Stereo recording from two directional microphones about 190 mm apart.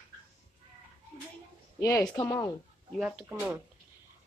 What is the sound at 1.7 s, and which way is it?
Speech, 15° left (ahead or behind).